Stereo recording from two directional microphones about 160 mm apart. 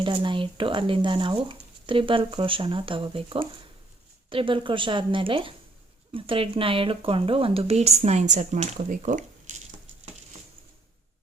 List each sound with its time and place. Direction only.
0.0 s speech: 30° right (ahead or behind); by 9.2 s 55° right (ahead or behind)